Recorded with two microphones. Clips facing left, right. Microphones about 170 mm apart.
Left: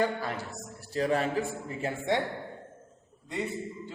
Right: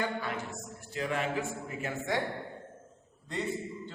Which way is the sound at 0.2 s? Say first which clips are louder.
Left 1 dB; 35° left (ahead or behind).